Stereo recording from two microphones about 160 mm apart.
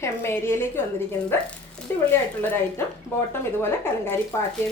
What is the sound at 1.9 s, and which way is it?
Speech, 15° left (ahead or behind).